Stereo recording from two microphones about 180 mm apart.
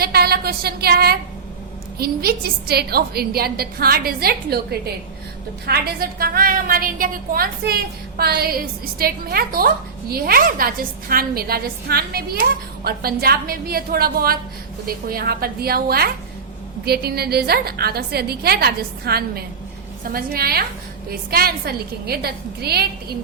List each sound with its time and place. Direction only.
0.0 s a woman's voice: 60° right (ahead or behind)